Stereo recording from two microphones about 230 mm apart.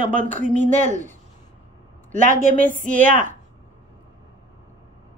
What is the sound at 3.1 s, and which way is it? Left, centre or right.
Speech, right.